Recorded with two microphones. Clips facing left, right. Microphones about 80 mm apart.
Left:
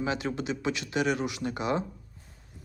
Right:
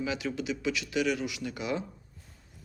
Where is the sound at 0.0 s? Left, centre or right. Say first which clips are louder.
Left 2 dB; left.